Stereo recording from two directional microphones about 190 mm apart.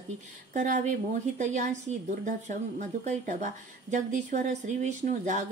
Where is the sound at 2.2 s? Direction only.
40° right (ahead or behind).